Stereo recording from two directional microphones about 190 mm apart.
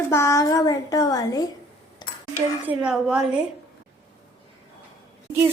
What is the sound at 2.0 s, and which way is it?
Dishes, 20° left (ahead or behind).